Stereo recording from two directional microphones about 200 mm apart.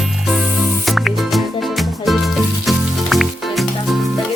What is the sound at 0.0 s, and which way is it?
Music, centre (ahead or behind).